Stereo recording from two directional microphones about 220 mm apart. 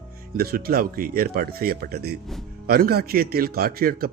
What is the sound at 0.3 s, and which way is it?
A man's voice, 45° right (ahead or behind).